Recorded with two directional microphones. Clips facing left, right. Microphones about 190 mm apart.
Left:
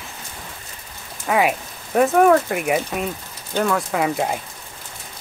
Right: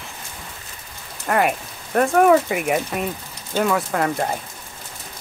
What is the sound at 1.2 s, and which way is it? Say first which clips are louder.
Speech: left 1 dB; 5° left (ahead or behind).